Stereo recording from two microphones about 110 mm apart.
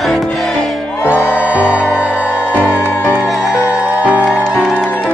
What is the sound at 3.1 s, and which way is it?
Music, centre (ahead or behind).